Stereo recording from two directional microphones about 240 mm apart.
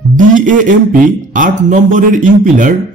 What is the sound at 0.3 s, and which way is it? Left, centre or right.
Speech, right.